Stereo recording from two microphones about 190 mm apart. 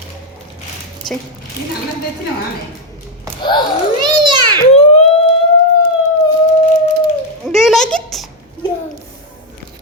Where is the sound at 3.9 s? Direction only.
20° right (ahead or behind).